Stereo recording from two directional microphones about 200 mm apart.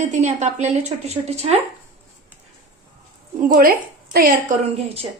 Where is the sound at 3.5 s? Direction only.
45° right (ahead or behind).